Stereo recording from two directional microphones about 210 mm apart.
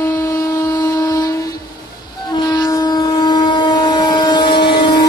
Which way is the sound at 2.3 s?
20° left (ahead or behind).